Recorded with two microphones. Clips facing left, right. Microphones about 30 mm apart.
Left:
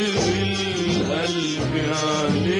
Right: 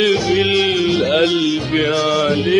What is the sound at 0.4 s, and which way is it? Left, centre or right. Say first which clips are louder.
Music: right 9 dB; right.